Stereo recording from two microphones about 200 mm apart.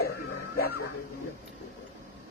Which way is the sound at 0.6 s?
50° left (ahead or behind).